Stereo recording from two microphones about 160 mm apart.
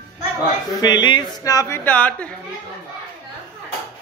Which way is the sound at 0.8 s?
30° left (ahead or behind).